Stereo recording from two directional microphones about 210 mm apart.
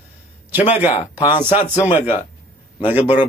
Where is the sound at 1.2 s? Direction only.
20° left (ahead or behind).